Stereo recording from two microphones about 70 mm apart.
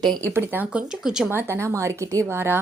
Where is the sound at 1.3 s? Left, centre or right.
Right.